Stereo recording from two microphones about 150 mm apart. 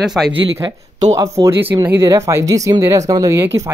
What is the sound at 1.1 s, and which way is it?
Speech, 20° right (ahead or behind).